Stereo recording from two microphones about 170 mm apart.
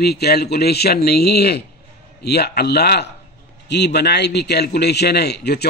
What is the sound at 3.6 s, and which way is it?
Speech, 90° left.